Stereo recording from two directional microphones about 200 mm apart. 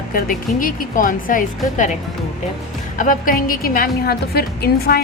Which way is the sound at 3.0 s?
45° left (ahead or behind).